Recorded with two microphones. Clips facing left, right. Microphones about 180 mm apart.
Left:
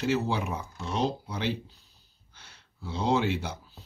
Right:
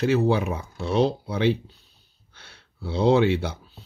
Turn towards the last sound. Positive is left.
turn(degrees=-65)  # may be behind; listen again after turning